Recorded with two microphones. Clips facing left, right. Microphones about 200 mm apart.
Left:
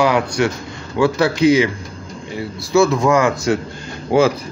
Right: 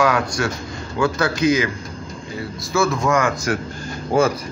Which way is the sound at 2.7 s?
20° left (ahead or behind).